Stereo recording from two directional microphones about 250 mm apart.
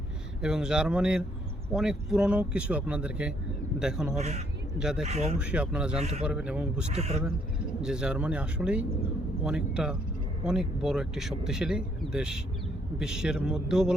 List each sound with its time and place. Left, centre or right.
0.4 s speech: centre
4.2 s speech: right
4.8 s speech: centre
5.0 s speech: right
5.4 s speech: centre
6.0 s speech: right
6.2 s speech: centre
6.9 s speech: right
7.8 s speech: centre